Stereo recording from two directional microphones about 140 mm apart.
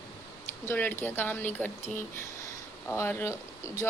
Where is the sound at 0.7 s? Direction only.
15° left (ahead or behind).